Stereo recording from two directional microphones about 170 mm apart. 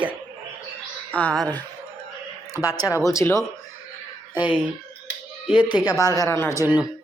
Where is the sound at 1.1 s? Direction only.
5° left (ahead or behind).